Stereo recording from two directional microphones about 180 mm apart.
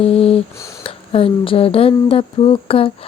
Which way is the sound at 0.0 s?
35° left (ahead or behind).